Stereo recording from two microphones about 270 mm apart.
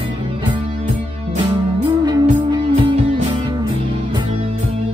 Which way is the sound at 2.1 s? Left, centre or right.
Centre.